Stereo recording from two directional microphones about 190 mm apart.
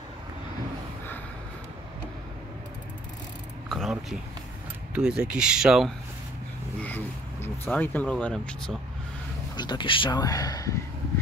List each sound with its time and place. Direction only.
3.6 s a sound: centre (ahead or behind)
4.9 s speech: 5° right (ahead or behind)
7.4 s speech: 10° left (ahead or behind)
9.6 s speech: 25° left (ahead or behind)